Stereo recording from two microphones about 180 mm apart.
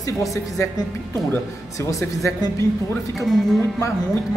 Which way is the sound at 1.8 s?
20° left (ahead or behind).